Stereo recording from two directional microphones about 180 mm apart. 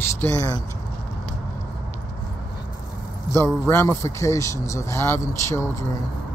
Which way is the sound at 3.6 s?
15° left (ahead or behind).